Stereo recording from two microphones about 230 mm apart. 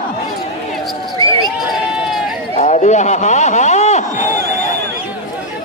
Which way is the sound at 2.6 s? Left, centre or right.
Left.